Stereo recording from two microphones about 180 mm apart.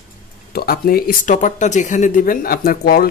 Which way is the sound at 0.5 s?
60° left (ahead or behind).